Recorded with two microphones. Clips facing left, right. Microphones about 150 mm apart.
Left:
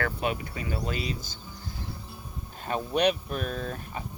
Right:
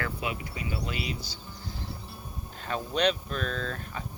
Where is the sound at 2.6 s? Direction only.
15° left (ahead or behind).